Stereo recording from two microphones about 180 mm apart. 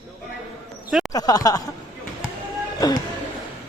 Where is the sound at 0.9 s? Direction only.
Centre (ahead or behind).